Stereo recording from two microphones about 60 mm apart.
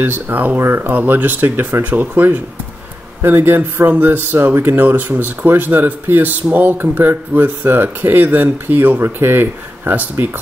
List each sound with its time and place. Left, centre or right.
0.0 s speech: right
0.9 s speech: right